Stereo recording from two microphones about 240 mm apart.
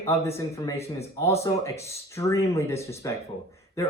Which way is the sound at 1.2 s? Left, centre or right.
Centre.